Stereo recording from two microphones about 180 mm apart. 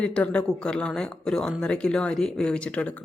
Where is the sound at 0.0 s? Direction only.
5° left (ahead or behind).